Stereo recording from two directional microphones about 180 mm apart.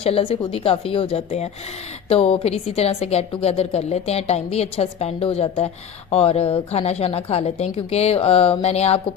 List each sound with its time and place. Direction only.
0.0 s a woman's voice: 30° left (ahead or behind)